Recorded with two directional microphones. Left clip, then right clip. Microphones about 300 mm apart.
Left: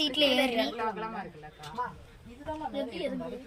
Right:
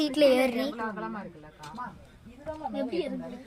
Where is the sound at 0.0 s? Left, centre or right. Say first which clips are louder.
Right 3 dB; centre.